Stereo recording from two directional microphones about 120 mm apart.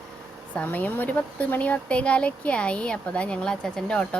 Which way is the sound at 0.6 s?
15° left (ahead or behind).